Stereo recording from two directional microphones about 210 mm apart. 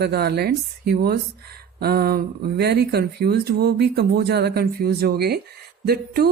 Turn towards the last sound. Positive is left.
turn(degrees=-50)  # may be behind; listen again after turning